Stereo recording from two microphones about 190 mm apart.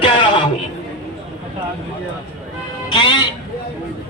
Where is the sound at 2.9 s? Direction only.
25° left (ahead or behind).